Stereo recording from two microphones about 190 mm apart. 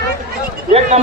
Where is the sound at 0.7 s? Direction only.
35° right (ahead or behind).